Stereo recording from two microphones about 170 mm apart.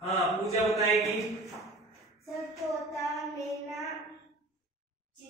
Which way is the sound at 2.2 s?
Centre (ahead or behind).